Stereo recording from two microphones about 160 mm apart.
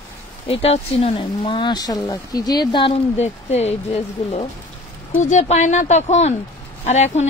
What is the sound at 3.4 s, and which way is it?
Speech, 45° left (ahead or behind).